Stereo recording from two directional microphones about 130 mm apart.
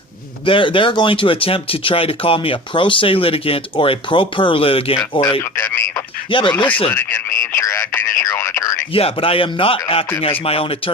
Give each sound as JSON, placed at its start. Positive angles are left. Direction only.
{"t": 0.4, "sound": "speech", "side_deg": 40}
{"t": 5.5, "sound": "speech", "side_deg": 20}
{"t": 8.9, "sound": "speech", "side_deg": 45}